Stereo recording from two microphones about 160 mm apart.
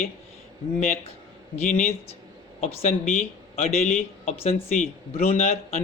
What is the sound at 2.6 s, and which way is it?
Speech, 40° left (ahead or behind).